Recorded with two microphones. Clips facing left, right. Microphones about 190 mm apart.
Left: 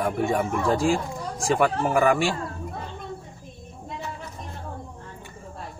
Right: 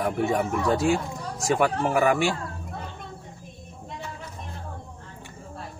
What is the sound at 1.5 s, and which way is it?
Speech, 5° right (ahead or behind).